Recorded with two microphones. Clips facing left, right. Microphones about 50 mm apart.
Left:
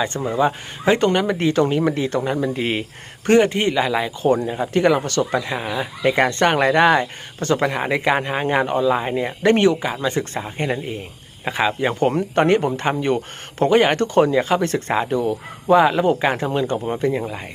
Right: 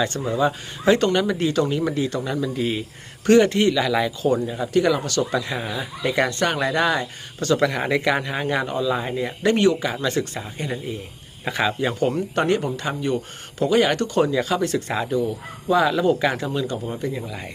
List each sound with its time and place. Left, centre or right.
0.0 s speech: left
3.2 s speech: left
4.3 s speech: left
10.3 s speech: left
11.4 s speech: left
15.8 s speech: left